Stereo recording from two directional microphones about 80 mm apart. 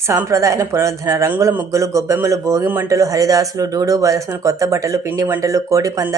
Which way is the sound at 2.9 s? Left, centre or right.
Right.